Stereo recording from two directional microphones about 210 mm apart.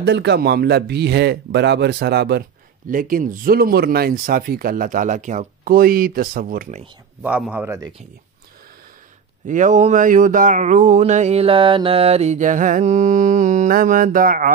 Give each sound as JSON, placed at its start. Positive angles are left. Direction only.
{"t": 0.0, "sound": "speech", "side_deg": -55}
{"t": 7.2, "sound": "a man's voice", "side_deg": -5}
{"t": 9.5, "sound": "a sound", "side_deg": -35}